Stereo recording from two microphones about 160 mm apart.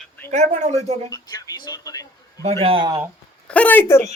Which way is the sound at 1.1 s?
25° left (ahead or behind).